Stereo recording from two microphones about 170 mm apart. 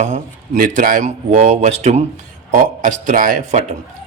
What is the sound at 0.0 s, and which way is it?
Speech, 50° right (ahead or behind).